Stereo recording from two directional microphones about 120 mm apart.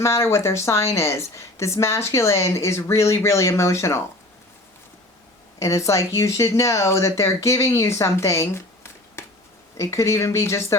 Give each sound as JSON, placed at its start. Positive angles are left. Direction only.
{"t": 0.0, "sound": "speech", "side_deg": 20}
{"t": 5.5, "sound": "speech", "side_deg": 25}